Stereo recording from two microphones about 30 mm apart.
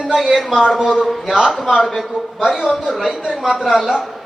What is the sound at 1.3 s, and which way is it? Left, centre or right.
Speech, centre.